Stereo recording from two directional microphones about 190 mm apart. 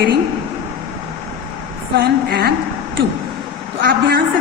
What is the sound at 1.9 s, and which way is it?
Speech, 60° right (ahead or behind).